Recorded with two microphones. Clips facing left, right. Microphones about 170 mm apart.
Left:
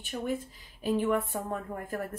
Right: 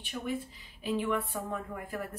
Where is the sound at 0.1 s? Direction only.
35° left (ahead or behind).